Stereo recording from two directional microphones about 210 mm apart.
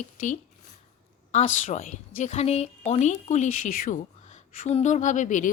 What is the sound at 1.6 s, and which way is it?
Speech, 30° left (ahead or behind).